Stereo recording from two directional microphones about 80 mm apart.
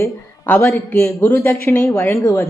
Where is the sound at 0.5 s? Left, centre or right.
Centre.